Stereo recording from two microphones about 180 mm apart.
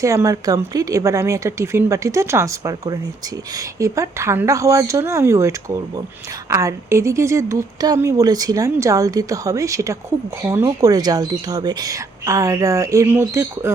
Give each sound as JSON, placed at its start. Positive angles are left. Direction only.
{"t": 0.0, "sound": "a woman's voice", "side_deg": -15}